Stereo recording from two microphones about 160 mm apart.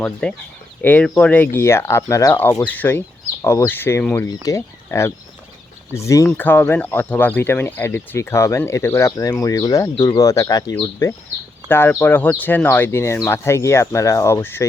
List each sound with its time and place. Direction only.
0.0 s speech: 5° left (ahead or behind)